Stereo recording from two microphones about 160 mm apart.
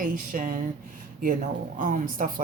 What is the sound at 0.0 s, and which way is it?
Speech, 60° right (ahead or behind).